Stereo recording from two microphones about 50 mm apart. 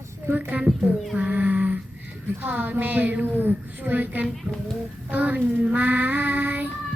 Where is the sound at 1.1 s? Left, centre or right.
Right.